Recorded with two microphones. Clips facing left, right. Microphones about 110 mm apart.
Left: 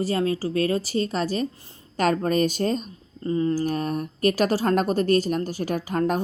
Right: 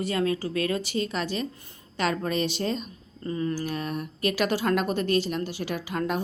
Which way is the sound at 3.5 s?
40° left (ahead or behind).